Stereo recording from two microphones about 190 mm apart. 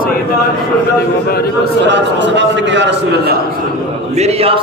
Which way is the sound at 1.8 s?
70° right (ahead or behind).